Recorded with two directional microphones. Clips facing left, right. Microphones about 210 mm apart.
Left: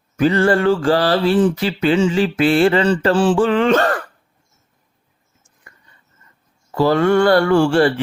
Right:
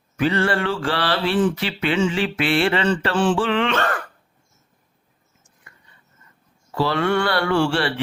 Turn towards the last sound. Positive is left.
turn(degrees=45)  # may be behind; listen again after turning